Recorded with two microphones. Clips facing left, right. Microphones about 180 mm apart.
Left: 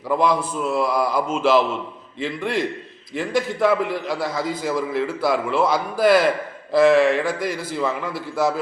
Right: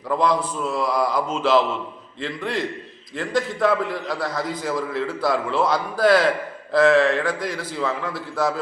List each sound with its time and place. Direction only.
0.1 s a man's voice: 5° left (ahead or behind)
3.2 s a man's voice: 5° left (ahead or behind)